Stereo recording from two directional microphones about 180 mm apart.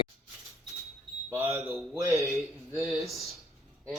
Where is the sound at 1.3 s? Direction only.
15° right (ahead or behind).